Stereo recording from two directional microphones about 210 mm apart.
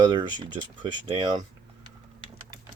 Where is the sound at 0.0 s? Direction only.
20° right (ahead or behind).